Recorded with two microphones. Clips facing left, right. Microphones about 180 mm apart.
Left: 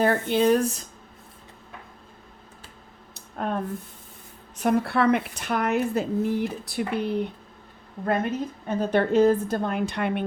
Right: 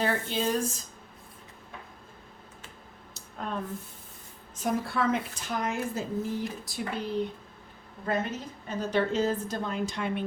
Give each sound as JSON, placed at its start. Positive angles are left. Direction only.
{"t": 0.0, "sound": "a woman's voice", "side_deg": 55}
{"t": 3.2, "sound": "a sound", "side_deg": 55}
{"t": 4.5, "sound": "a woman's voice", "side_deg": 65}